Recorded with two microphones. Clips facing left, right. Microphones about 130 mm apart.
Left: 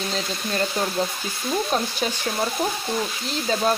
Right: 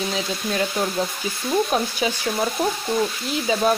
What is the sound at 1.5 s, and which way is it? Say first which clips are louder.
Speech: right 3 dB; 10° right (ahead or behind).